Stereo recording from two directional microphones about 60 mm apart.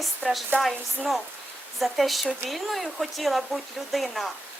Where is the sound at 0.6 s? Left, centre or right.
Centre.